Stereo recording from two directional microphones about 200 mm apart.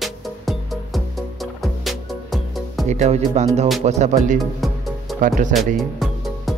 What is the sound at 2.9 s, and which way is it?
Speech, 35° right (ahead or behind).